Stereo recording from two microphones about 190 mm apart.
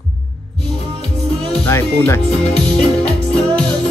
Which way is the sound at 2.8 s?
5° left (ahead or behind).